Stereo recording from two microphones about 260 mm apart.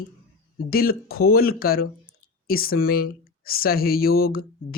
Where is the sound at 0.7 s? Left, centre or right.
Left.